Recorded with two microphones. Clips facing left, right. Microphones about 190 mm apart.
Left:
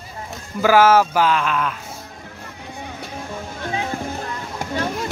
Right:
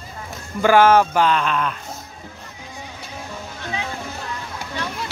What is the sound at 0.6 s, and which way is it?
Speech, 5° left (ahead or behind).